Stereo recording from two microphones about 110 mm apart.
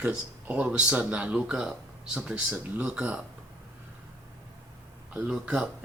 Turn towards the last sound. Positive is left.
turn(degrees=-10)  # may be behind; listen again after turning